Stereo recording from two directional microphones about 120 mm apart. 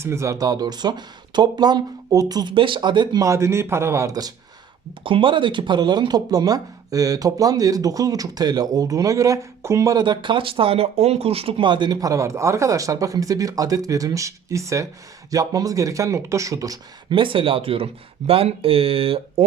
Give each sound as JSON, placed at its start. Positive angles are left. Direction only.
{"t": 0.0, "sound": "speech", "side_deg": -25}
{"t": 5.0, "sound": "speech", "side_deg": -45}
{"t": 17.1, "sound": "speech", "side_deg": -45}